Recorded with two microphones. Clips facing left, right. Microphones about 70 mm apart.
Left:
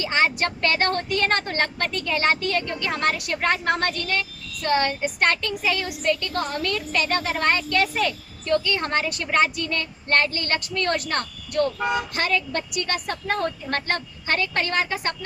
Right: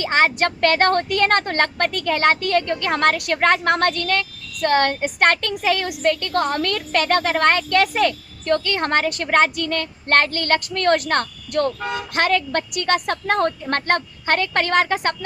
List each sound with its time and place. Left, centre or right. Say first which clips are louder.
0.0 s speech: right 4 dB; right
11.8 s speech: left 2 dB; centre
12.1 s speech: right 5 dB; right